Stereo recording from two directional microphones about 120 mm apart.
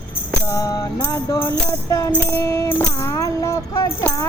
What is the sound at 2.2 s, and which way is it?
Music, 20° left (ahead or behind).